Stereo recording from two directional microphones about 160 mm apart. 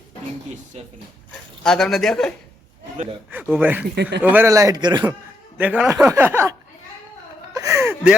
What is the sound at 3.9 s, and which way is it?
Speech, 90° right.